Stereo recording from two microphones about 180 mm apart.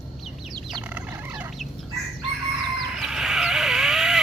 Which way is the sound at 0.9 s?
10° right (ahead or behind).